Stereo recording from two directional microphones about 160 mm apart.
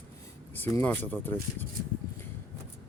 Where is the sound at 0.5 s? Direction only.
10° left (ahead or behind).